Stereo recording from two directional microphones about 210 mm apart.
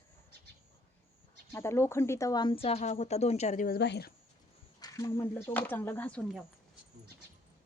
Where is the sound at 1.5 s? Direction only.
15° left (ahead or behind); by 4.1 s 50° left (ahead or behind).